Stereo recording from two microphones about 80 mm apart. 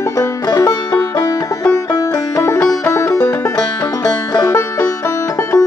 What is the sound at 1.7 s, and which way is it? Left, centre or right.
Music, left.